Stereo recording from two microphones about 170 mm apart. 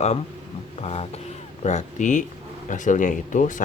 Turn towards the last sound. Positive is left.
turn(degrees=50)  # may be behind; listen again after turning